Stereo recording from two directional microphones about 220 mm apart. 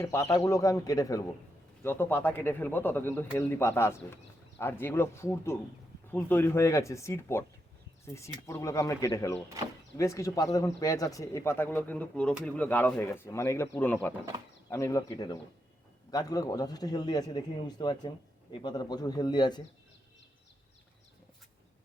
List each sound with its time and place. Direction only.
0.0 s a man's voice: 10° left (ahead or behind)